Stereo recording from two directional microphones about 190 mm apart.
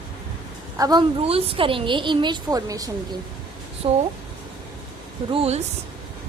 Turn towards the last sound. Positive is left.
turn(degrees=-30)  # may be behind; listen again after turning